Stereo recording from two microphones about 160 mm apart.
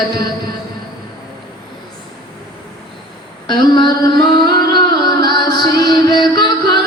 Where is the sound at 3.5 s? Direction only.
30° left (ahead or behind).